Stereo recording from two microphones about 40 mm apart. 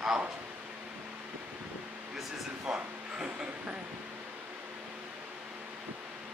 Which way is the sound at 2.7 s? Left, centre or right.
Right.